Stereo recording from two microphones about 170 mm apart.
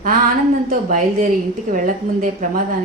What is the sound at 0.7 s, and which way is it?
Speech, 50° right (ahead or behind).